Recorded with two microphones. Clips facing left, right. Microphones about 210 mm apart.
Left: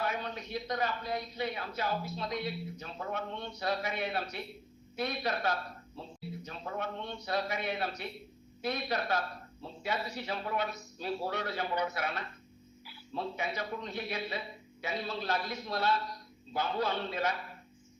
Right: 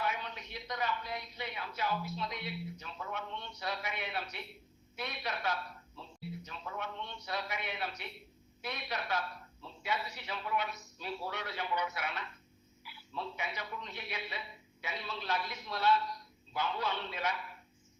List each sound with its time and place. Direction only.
0.0 s a man's voice: 40° left (ahead or behind)